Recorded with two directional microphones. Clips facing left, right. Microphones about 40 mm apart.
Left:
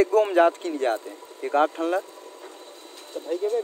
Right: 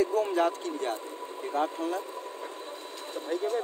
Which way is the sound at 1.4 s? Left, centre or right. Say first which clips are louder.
Left 8 dB; left.